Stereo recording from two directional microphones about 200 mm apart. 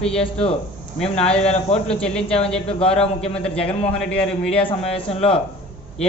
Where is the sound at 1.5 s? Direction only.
30° left (ahead or behind).